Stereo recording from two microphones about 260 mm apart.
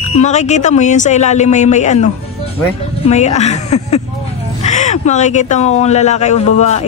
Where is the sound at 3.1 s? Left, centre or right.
Left.